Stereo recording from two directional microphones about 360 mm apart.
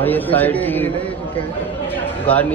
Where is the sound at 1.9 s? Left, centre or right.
Centre.